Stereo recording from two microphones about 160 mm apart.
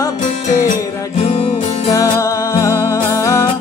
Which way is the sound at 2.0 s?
20° left (ahead or behind).